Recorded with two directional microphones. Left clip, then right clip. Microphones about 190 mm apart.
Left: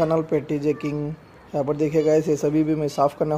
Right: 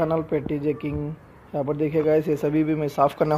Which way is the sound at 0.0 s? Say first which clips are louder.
Left 2 dB; 10° left (ahead or behind).